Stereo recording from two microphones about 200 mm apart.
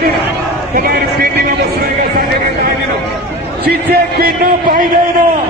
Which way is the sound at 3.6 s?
50° right (ahead or behind).